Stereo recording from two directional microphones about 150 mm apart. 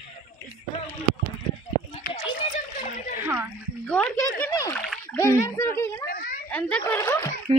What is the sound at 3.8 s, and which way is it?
Splash, 10° left (ahead or behind).